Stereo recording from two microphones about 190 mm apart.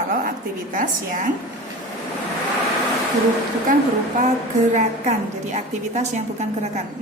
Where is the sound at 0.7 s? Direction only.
45° right (ahead or behind).